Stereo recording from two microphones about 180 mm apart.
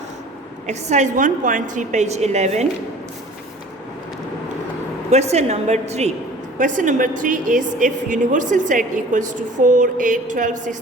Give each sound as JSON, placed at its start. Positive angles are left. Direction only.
{"t": 0.7, "sound": "a woman's voice", "side_deg": -40}
{"t": 5.1, "sound": "a woman's voice", "side_deg": -40}